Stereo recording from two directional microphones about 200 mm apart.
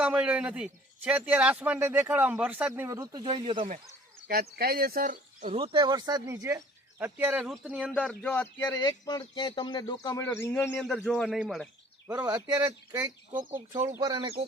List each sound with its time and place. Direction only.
0.0 s a man's voice: 5° right (ahead or behind); by 3.8 s 30° right (ahead or behind)
4.3 s speech: 50° right (ahead or behind)
5.5 s a man's voice: 25° right (ahead or behind); by 7.9 s 5° right (ahead or behind)
7.9 s speech: 5° left (ahead or behind)
8.8 s speech: 20° left (ahead or behind); by 11.7 s centre (ahead or behind)
12.2 s a man's voice: 20° right (ahead or behind)